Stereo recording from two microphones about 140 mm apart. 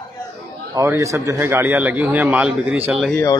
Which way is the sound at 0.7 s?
20° right (ahead or behind).